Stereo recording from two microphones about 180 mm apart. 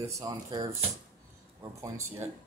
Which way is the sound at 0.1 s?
20° right (ahead or behind).